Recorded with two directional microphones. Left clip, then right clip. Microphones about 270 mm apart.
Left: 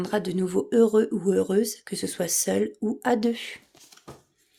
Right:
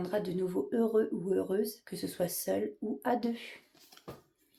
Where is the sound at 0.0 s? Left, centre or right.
Left.